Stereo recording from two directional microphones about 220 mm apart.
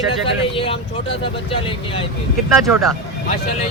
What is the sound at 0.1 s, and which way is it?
Speech, 25° left (ahead or behind).